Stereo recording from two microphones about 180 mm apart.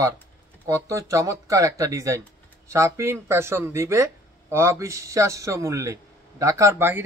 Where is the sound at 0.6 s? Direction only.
15° right (ahead or behind).